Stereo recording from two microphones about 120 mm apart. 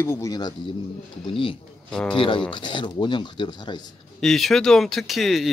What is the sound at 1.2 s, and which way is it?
Speech, 45° left (ahead or behind).